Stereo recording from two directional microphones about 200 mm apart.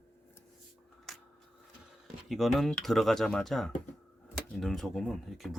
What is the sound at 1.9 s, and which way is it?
Speech, centre (ahead or behind).